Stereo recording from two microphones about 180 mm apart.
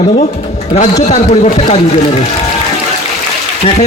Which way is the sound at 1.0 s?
40° left (ahead or behind).